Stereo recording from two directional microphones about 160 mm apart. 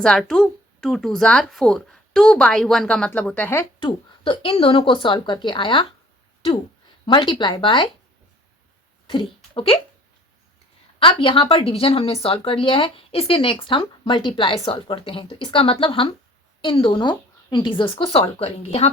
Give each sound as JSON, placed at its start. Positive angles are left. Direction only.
{"t": 0.0, "sound": "speech", "side_deg": 5}
{"t": 3.8, "sound": "speech", "side_deg": 30}
{"t": 7.0, "sound": "speech", "side_deg": 30}
{"t": 9.0, "sound": "speech", "side_deg": 30}
{"t": 11.0, "sound": "speech", "side_deg": 35}